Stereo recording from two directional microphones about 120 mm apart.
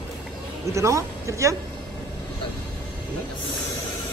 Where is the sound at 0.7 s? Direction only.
25° right (ahead or behind).